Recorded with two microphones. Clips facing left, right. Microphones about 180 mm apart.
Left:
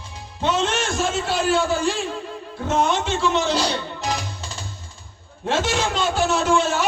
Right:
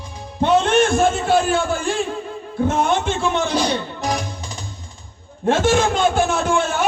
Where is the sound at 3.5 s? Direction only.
15° right (ahead or behind).